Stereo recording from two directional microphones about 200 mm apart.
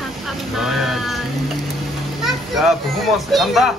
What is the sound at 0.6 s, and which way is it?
Speech, centre (ahead or behind).